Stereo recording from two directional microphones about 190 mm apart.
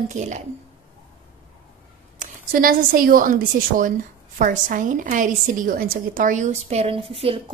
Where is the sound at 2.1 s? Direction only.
50° right (ahead or behind).